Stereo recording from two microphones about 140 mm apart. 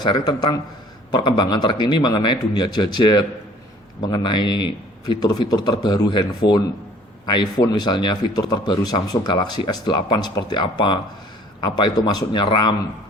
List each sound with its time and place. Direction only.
0.0 s a man's voice: 30° left (ahead or behind)